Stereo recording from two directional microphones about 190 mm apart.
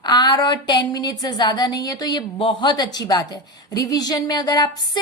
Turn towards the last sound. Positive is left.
turn(degrees=20)  # may be behind; listen again after turning